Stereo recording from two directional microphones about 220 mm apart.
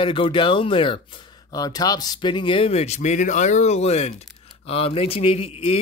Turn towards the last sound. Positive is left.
turn(degrees=25)  # may be behind; listen again after turning